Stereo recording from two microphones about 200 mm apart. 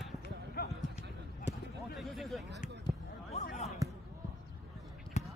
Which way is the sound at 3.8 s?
15° right (ahead or behind).